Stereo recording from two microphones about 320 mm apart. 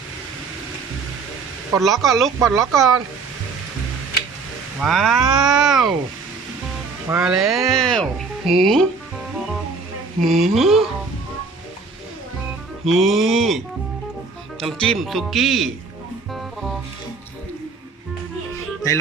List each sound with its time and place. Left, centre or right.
1.7 s speech: centre
4.8 s speech: centre
7.1 s speech: centre
10.2 s speech: centre
12.9 s speech: centre
14.6 s speech: centre